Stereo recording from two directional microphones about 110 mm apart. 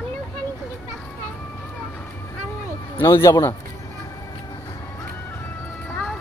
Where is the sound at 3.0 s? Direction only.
25° left (ahead or behind).